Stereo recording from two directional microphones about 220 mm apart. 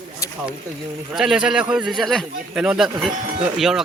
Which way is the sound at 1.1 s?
Centre (ahead or behind).